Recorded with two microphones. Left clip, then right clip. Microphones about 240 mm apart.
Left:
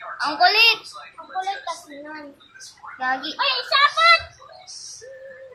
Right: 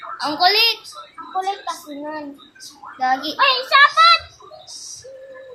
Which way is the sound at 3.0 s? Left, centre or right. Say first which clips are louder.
Right 6 dB; centre.